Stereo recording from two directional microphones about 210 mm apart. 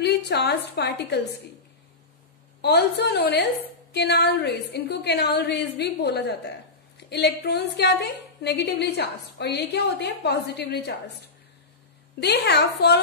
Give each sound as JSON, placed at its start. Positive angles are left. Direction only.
{"t": 0.0, "sound": "a woman's voice", "side_deg": 50}
{"t": 2.6, "sound": "a woman's voice", "side_deg": 50}
{"t": 12.2, "sound": "a woman's voice", "side_deg": 50}